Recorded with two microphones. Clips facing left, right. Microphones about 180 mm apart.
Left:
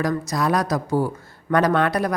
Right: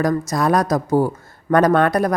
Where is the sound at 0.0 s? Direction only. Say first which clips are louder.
Right 4 dB; 45° right (ahead or behind).